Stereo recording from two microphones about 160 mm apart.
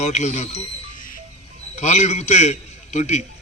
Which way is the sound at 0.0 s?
45° left (ahead or behind).